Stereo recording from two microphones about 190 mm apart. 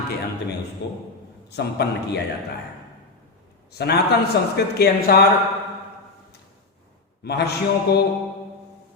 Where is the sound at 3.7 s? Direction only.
60° left (ahead or behind).